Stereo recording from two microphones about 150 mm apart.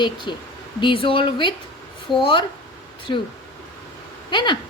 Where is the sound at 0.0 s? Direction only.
30° left (ahead or behind).